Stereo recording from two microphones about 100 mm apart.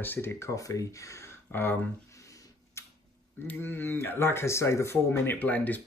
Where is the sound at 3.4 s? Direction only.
20° left (ahead or behind).